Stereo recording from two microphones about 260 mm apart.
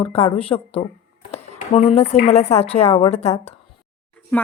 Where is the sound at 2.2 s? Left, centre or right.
Left.